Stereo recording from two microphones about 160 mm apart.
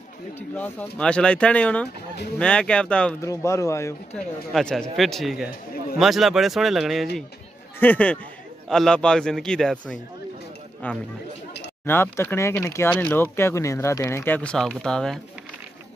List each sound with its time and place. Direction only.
0.4 s speech: 10° left (ahead or behind)
3.2 s speech: 20° left (ahead or behind)
4.5 s speech: 5° left (ahead or behind)